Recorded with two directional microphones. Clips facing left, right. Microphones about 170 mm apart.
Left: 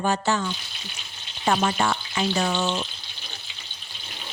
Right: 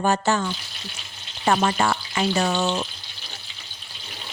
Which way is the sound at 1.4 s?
55° right (ahead or behind).